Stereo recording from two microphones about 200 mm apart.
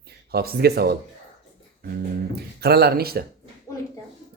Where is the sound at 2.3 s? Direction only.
50° right (ahead or behind).